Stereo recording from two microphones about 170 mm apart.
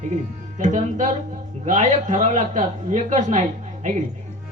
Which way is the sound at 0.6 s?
45° right (ahead or behind).